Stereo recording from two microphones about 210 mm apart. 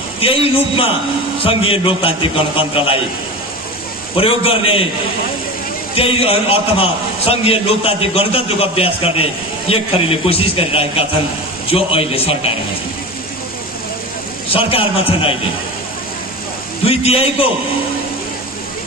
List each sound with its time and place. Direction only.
0.2 s a man's voice: 25° left (ahead or behind)
4.2 s a man's voice: 25° left (ahead or behind)
5.9 s a man's voice: 25° left (ahead or behind)
14.7 s a man's voice: 25° left (ahead or behind)
16.8 s a man's voice: 30° left (ahead or behind)